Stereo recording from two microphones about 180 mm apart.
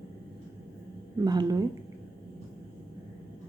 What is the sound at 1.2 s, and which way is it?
Speech, 20° right (ahead or behind).